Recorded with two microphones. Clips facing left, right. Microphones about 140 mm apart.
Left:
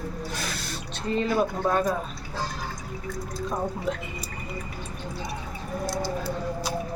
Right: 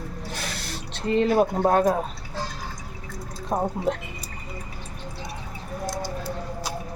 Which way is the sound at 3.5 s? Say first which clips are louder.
Right 5 dB; 50° right (ahead or behind).